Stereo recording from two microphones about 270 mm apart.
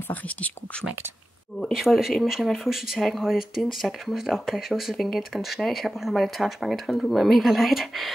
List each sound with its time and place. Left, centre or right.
0.1 s speech: centre